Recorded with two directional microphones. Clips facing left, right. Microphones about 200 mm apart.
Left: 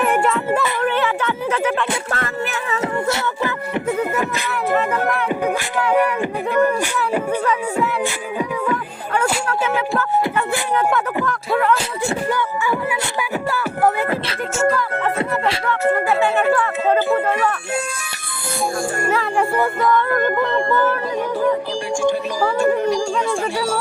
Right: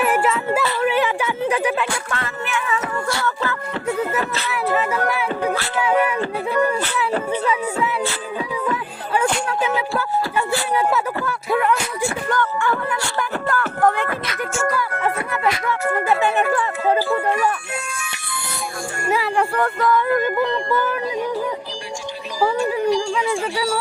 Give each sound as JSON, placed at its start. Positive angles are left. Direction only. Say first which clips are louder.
{"t": 0.0, "sound": "a sound", "louder": "left 1 dB", "side_deg": -5}
{"t": 2.1, "sound": "music", "louder": "left 2 dB", "side_deg": 40}
{"t": 12.3, "sound": "music", "louder": "even", "side_deg": 10}
{"t": 14.1, "sound": "music", "louder": "left 3 dB", "side_deg": 25}
{"t": 19.4, "sound": "speech", "louder": "left 1 dB", "side_deg": 0}
{"t": 20.1, "sound": "music", "louder": "left 1 dB", "side_deg": 55}